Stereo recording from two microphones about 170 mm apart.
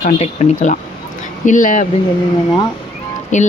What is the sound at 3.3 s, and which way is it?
Speech, 45° left (ahead or behind).